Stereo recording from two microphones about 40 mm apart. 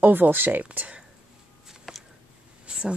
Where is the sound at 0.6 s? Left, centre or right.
Right.